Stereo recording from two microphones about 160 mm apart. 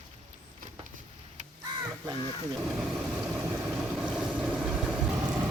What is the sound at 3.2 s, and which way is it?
Boat, 15° right (ahead or behind).